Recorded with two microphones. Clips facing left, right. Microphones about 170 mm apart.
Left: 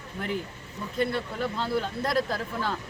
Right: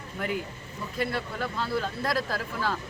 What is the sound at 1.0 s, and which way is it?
Speech, 25° left (ahead or behind).